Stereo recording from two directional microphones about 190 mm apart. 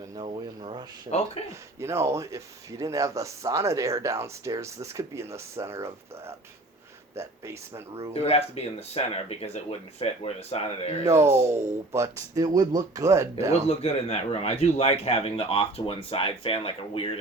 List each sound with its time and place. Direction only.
0.2 s speech: 25° right (ahead or behind)
1.1 s speech: 35° left (ahead or behind)
1.8 s speech: 15° right (ahead or behind)
8.1 s speech: 35° left (ahead or behind)
11.2 s speech: 15° right (ahead or behind)
13.5 s a man's voice: 35° left (ahead or behind)